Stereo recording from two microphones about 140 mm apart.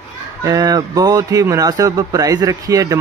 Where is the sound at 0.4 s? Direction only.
25° right (ahead or behind).